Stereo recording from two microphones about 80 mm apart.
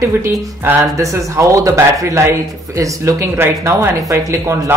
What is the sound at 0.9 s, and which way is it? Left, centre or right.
Speech, right.